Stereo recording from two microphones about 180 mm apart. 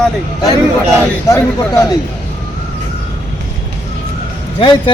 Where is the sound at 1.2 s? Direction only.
20° left (ahead or behind).